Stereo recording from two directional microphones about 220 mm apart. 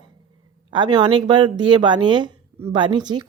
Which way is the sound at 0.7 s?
20° right (ahead or behind).